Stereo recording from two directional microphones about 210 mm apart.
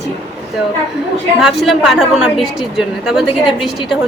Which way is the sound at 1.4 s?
Centre (ahead or behind).